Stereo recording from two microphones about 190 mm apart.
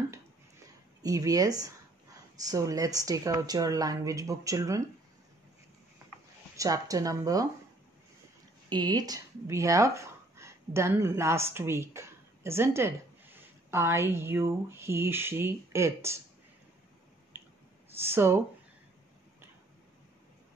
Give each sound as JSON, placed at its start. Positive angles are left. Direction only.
{"t": 1.0, "sound": "a woman's voice", "side_deg": -20}
{"t": 6.5, "sound": "a woman's voice", "side_deg": -15}
{"t": 8.6, "sound": "speech", "side_deg": -20}
{"t": 17.3, "sound": "a sound", "side_deg": -10}
{"t": 17.9, "sound": "a woman's voice", "side_deg": -10}